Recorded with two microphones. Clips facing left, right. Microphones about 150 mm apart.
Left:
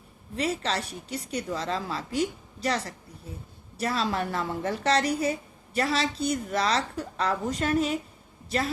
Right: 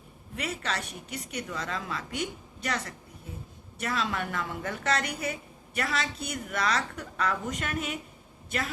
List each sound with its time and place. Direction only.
0.3 s a woman's voice: 30° left (ahead or behind)